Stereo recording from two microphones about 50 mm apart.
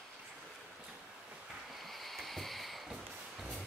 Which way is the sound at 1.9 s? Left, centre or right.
Centre.